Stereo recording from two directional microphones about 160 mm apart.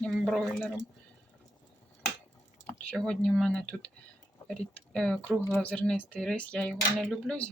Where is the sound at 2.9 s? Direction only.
5° left (ahead or behind).